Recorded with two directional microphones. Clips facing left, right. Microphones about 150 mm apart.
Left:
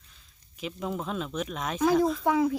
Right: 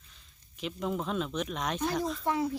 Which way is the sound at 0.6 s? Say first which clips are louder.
Even; centre (ahead or behind).